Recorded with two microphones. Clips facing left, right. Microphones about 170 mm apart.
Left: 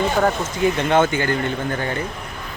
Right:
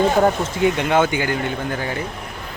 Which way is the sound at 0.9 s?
10° right (ahead or behind).